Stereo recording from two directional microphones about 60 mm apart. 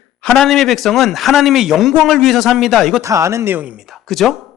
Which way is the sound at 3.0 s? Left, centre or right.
Right.